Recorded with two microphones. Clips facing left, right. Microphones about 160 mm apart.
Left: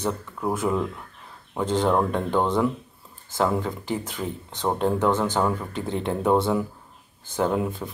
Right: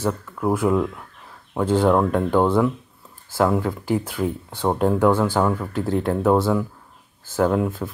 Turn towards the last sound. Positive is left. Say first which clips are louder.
# right 4 dB
turn(degrees=0)  # may be behind; listen again after turning